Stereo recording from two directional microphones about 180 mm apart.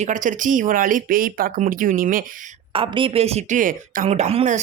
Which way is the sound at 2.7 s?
30° right (ahead or behind).